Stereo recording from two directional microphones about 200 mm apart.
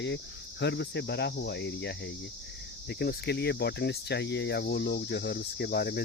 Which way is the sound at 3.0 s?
55° left (ahead or behind).